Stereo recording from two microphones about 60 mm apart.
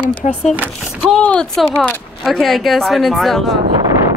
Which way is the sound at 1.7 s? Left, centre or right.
Left.